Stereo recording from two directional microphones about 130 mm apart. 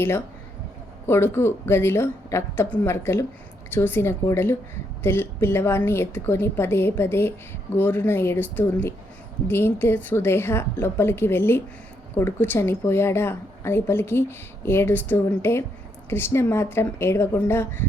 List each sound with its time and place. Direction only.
1.0 s a woman's voice: 20° left (ahead or behind)